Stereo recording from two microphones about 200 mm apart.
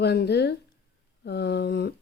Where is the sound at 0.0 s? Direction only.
55° left (ahead or behind).